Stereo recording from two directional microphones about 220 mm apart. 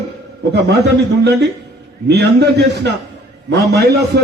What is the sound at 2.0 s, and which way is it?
A man's voice, 50° right (ahead or behind).